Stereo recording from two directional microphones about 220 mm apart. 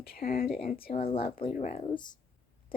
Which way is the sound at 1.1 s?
25° left (ahead or behind).